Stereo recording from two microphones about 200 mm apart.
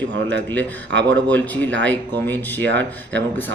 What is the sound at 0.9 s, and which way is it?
Speech, 65° right (ahead or behind).